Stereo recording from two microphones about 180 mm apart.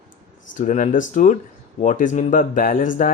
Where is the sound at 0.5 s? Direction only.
45° left (ahead or behind).